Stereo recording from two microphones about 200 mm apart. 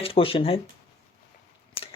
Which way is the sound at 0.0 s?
30° left (ahead or behind).